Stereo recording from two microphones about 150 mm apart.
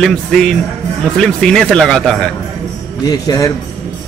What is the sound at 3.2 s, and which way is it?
Speech, 25° left (ahead or behind).